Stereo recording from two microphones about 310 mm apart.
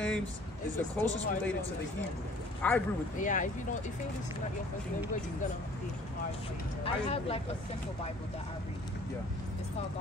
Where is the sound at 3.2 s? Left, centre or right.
Left.